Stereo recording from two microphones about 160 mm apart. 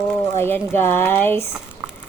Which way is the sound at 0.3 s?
15° left (ahead or behind).